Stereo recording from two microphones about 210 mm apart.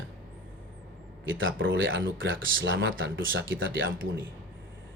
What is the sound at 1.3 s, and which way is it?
Speech, 65° right (ahead or behind).